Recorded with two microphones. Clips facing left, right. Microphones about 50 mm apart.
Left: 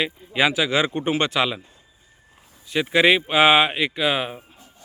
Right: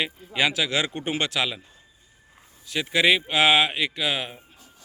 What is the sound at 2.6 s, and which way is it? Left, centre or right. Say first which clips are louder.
Speech: left 4 dB; centre.